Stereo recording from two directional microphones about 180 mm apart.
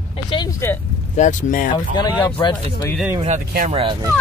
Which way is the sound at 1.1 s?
45° left (ahead or behind).